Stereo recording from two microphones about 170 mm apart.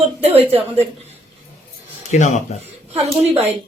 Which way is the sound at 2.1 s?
45° left (ahead or behind).